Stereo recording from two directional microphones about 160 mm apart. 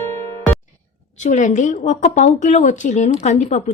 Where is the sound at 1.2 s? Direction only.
50° left (ahead or behind).